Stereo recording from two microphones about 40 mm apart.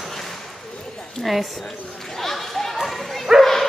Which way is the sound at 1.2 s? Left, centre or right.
Centre.